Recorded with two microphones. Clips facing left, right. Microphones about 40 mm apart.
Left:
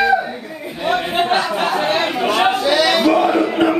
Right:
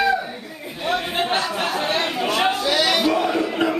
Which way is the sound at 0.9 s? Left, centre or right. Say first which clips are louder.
Left 5 dB; centre.